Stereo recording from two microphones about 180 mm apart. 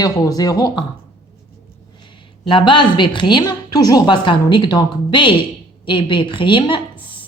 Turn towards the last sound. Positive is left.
turn(degrees=25)  # may be behind; listen again after turning